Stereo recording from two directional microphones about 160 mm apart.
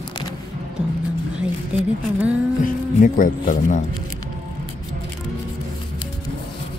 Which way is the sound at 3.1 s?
60° left (ahead or behind).